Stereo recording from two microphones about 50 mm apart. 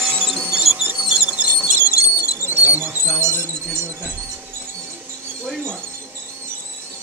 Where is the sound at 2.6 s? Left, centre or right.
Right.